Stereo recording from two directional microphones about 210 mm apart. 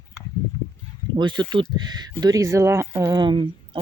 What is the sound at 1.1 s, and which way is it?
Speech, 20° right (ahead or behind).